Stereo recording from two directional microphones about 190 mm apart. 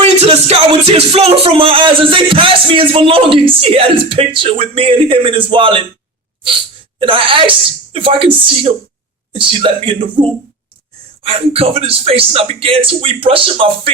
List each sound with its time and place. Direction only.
0.0 s music: 35° right (ahead or behind)
7.0 s music: 25° right (ahead or behind)
9.3 s music: 30° right (ahead or behind)